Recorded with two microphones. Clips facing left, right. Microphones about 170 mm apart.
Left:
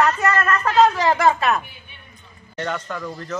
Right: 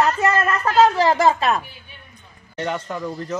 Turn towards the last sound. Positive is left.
turn(degrees=-15)  # may be behind; listen again after turning